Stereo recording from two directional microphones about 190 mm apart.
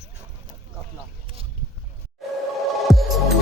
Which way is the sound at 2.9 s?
Centre (ahead or behind).